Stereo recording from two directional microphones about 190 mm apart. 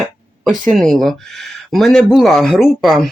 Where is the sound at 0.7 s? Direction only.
Centre (ahead or behind).